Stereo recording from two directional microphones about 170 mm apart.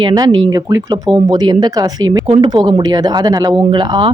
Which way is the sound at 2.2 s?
35° right (ahead or behind).